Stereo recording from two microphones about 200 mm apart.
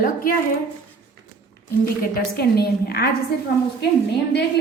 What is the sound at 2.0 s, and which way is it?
A woman's voice, 50° left (ahead or behind).